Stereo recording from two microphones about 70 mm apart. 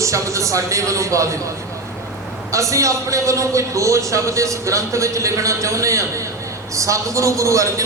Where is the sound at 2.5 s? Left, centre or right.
Right.